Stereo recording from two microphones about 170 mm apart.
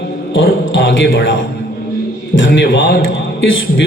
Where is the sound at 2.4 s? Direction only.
90° left.